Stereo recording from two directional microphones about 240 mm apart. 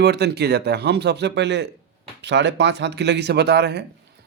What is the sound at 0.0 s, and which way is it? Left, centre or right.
A man's voice, right.